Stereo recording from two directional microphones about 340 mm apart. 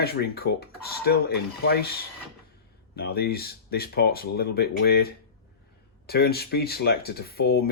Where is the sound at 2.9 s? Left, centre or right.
Left.